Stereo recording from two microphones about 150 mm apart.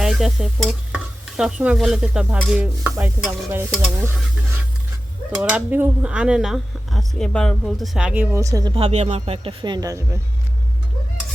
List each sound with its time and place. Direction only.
0.0 s stir: 5° right (ahead or behind)
2.5 s speech: 10° right (ahead or behind)
5.4 s speech: 10° right (ahead or behind)
8.7 s speech: 45° right (ahead or behind); by 10.2 s 20° right (ahead or behind)